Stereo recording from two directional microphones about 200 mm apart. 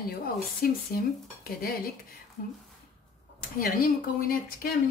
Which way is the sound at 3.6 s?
50° left (ahead or behind).